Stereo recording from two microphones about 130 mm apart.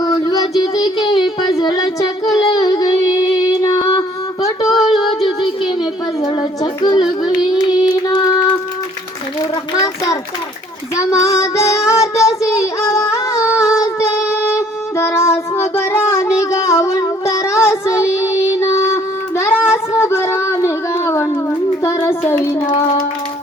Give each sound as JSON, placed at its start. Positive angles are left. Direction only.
{"t": 0.0, "sound": "child singing", "side_deg": 30}
{"t": 1.5, "sound": "music", "side_deg": 30}
{"t": 2.4, "sound": "female singing", "side_deg": 30}
{"t": 4.8, "sound": "child singing", "side_deg": 0}
{"t": 6.2, "sound": "a sound", "side_deg": 40}
{"t": 6.6, "sound": "music", "side_deg": 35}
{"t": 8.0, "sound": "music", "side_deg": 30}
{"t": 9.7, "sound": "child singing", "side_deg": 30}
{"t": 22.5, "sound": "child singing", "side_deg": 45}